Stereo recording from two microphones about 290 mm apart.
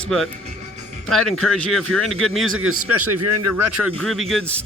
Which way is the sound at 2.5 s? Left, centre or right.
Right.